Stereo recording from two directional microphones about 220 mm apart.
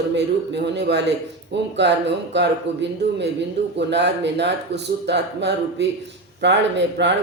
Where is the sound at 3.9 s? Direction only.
50° right (ahead or behind).